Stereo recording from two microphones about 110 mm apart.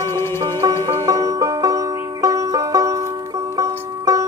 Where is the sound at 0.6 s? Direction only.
35° right (ahead or behind).